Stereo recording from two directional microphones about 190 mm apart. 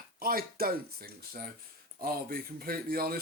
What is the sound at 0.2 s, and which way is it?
Speech, 50° right (ahead or behind).